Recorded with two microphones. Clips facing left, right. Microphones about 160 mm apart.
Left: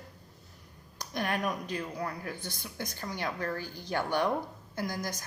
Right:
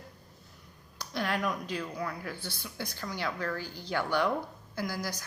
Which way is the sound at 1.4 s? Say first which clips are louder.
Even; 30° left (ahead or behind).